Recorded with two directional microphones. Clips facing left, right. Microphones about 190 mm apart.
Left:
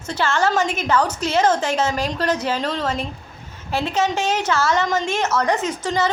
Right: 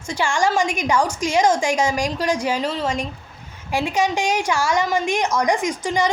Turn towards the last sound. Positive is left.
turn(degrees=-15)  # may be behind; listen again after turning